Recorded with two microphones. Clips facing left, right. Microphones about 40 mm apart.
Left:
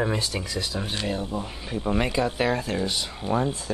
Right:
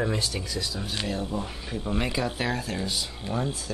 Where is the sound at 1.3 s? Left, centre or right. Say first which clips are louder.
Left 1 dB; centre.